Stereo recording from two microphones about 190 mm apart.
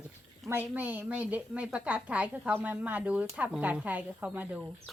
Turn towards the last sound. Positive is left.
turn(degrees=-10)  # may be behind; listen again after turning